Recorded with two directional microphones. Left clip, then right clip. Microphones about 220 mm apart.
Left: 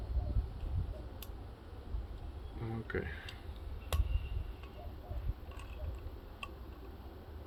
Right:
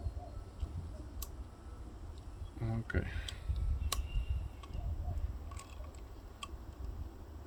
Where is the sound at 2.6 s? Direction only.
60° right (ahead or behind).